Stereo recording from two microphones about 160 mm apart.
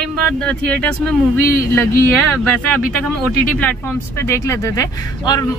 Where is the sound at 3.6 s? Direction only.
10° left (ahead or behind).